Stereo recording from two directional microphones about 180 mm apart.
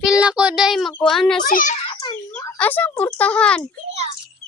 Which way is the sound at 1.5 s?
45° left (ahead or behind).